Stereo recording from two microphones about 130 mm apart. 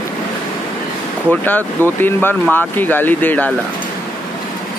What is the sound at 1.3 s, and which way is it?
Speech, 15° left (ahead or behind).